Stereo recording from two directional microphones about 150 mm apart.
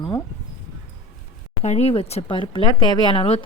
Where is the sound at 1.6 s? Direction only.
45° left (ahead or behind).